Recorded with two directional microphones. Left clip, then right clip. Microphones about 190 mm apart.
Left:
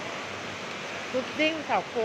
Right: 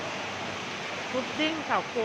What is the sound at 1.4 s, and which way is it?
Speech, 5° left (ahead or behind).